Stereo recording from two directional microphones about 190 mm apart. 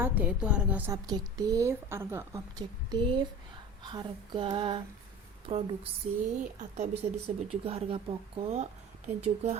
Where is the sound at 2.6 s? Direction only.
30° right (ahead or behind).